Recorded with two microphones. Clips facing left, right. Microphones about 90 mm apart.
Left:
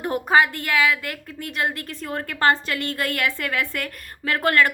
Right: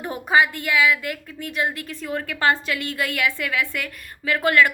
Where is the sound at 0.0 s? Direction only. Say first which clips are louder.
Left 1 dB; 45° left (ahead or behind).